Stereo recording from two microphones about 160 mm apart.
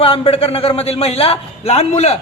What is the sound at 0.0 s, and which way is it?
A woman's voice, 35° left (ahead or behind).